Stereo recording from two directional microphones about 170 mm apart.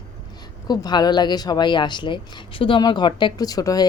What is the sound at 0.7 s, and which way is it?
A woman's voice, 25° left (ahead or behind).